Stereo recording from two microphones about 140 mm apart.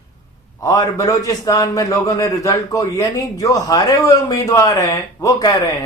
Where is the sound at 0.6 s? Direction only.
25° left (ahead or behind).